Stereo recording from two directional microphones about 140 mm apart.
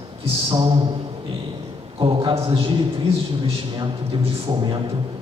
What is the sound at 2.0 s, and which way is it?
Speech, 35° right (ahead or behind).